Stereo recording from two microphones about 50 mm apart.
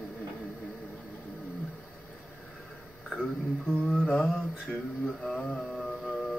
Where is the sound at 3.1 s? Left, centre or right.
Centre.